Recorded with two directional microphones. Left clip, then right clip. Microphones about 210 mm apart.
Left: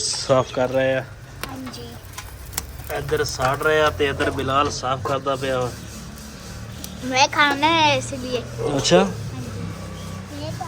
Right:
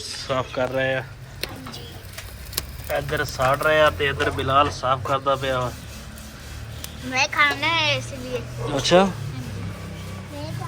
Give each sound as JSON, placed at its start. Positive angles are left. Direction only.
{"t": 0.1, "sound": "speech", "side_deg": 20}
{"t": 2.9, "sound": "speech", "side_deg": 5}
{"t": 7.1, "sound": "a child's voice", "side_deg": 50}
{"t": 8.6, "sound": "speech", "side_deg": 15}